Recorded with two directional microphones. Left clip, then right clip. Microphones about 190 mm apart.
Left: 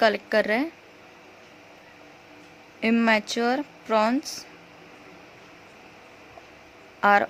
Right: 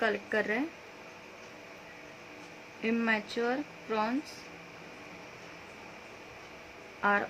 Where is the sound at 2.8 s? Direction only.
60° left (ahead or behind).